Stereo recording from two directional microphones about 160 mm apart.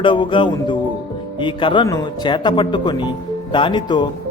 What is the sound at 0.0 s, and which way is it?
Music, 30° left (ahead or behind).